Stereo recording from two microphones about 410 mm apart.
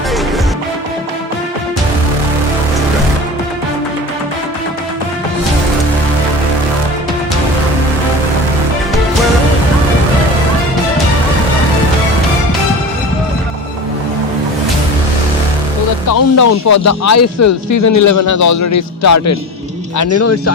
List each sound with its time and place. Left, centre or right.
16.0 s a man's voice: left